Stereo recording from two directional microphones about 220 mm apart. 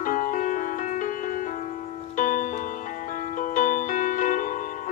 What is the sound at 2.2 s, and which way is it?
Music, 35° left (ahead or behind).